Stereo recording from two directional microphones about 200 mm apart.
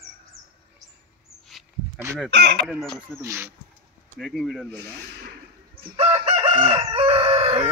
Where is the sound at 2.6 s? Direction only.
Centre (ahead or behind).